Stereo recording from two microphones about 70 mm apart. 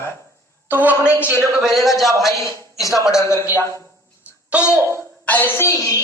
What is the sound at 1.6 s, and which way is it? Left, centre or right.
Speech, centre.